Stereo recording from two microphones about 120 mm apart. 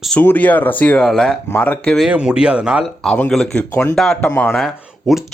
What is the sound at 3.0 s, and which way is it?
Speech, 5° left (ahead or behind).